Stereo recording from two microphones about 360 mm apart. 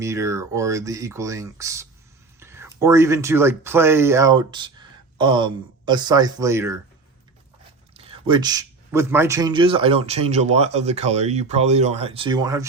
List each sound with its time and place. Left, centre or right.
0.0 s a man's voice: centre
7.9 s a man's voice: centre